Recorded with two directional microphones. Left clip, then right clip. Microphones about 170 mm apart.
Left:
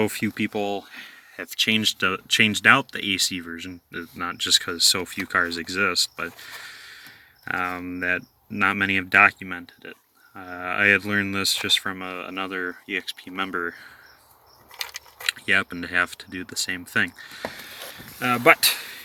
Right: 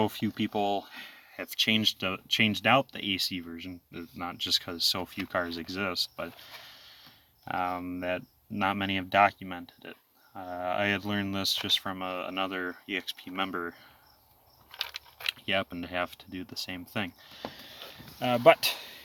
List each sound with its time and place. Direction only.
0.0 s speech: 5° right (ahead or behind)
9.9 s a sound: 25° left (ahead or behind)
10.6 s speech: 5° right (ahead or behind)
15.3 s speech: 5° right (ahead or behind)